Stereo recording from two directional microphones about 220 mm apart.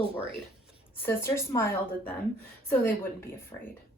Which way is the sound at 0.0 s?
25° right (ahead or behind).